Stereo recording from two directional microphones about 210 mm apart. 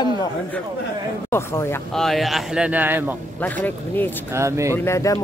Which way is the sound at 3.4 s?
10° left (ahead or behind).